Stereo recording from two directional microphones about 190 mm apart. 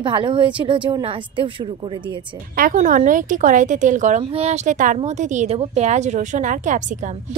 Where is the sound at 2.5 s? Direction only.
45° right (ahead or behind).